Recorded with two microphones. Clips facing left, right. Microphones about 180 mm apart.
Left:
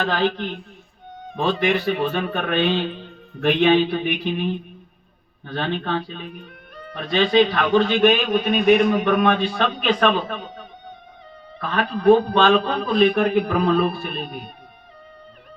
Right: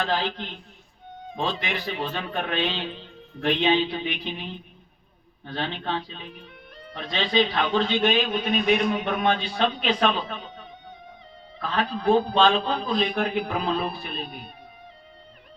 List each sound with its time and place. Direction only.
0.1 s a man's voice: 70° left (ahead or behind)
5.5 s a man's voice: 60° left (ahead or behind)
8.3 s a man's voice: 55° left (ahead or behind)
11.8 s a man's voice: 60° left (ahead or behind)